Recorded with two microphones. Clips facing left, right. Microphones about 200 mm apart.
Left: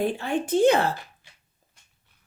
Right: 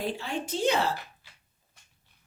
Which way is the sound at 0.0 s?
55° left (ahead or behind).